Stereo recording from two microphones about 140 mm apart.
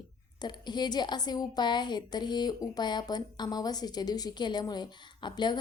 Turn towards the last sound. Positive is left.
turn(degrees=30)  # may be behind; listen again after turning